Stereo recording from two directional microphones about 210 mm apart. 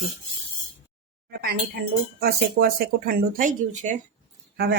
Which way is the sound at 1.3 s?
50° right (ahead or behind).